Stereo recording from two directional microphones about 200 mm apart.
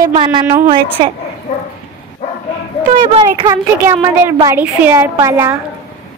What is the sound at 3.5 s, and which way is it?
Speech, 10° right (ahead or behind).